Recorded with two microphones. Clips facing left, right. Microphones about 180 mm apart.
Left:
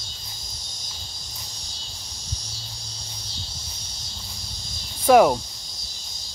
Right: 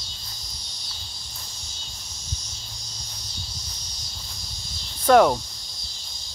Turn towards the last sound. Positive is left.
turn(degrees=10)  # may be behind; listen again after turning